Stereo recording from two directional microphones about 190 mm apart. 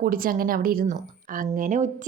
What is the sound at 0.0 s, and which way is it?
A woman's voice, 50° right (ahead or behind).